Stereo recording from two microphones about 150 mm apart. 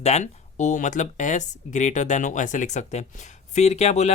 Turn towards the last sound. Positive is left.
turn(degrees=50)  # may be behind; listen again after turning